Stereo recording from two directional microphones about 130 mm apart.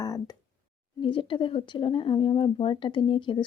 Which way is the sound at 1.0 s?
40° left (ahead or behind).